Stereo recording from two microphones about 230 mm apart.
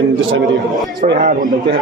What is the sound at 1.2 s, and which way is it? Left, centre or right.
Speech, right.